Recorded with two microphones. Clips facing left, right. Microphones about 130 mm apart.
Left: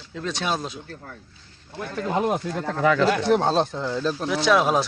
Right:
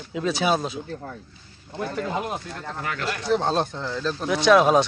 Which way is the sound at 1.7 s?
15° right (ahead or behind).